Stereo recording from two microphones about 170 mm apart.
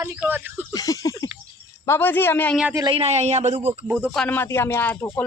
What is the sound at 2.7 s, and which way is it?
Speech, 30° right (ahead or behind).